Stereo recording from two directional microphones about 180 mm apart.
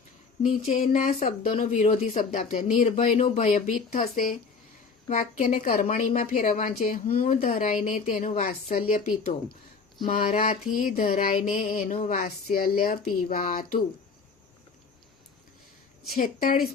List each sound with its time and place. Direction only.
0.4 s a woman's voice: 45° left (ahead or behind)
16.1 s speech: 50° left (ahead or behind)